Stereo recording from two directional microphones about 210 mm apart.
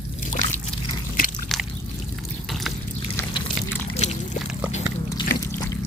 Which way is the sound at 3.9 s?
35° left (ahead or behind).